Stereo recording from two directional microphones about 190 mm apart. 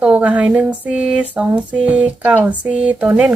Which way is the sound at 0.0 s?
5° right (ahead or behind).